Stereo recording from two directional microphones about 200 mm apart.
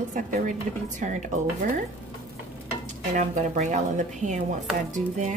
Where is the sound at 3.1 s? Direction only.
40° right (ahead or behind).